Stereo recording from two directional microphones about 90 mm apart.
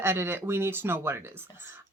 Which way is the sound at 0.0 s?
30° right (ahead or behind).